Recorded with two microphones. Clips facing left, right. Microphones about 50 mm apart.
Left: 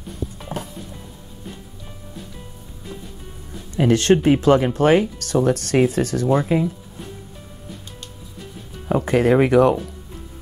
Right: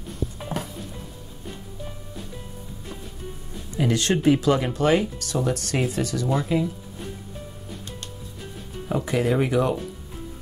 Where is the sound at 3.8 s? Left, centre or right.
Left.